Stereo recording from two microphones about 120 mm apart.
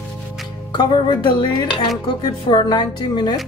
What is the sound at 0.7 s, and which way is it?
Speech, 40° left (ahead or behind).